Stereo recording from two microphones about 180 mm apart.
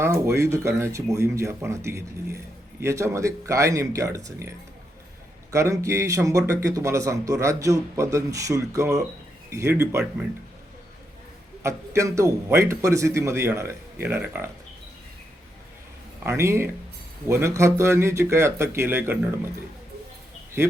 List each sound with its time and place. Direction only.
0.0 s speech: 15° right (ahead or behind)
11.6 s speech: 15° right (ahead or behind)
16.2 s speech: 15° right (ahead or behind)